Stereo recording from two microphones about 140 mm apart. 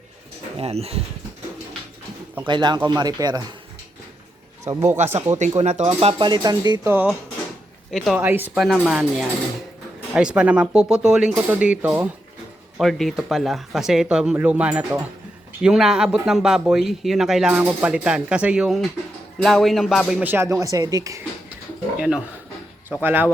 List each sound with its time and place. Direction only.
0.6 s speech: 45° right (ahead or behind)
2.5 s speech: 35° right (ahead or behind)
4.8 s speech: 55° right (ahead or behind)
6.0 s speech: 40° right (ahead or behind)
7.9 s speech: centre (ahead or behind)
8.2 s speech: 15° right (ahead or behind)
8.5 s speech: centre (ahead or behind)
12.7 s speech: centre (ahead or behind); by 21.2 s 25° right (ahead or behind)
21.9 s speech: 5° right (ahead or behind)